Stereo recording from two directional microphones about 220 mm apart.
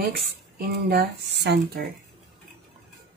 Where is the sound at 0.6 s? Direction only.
45° right (ahead or behind).